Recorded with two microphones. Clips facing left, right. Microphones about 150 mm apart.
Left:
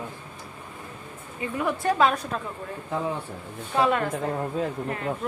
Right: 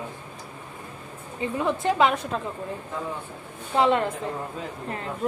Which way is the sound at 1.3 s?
25° right (ahead or behind).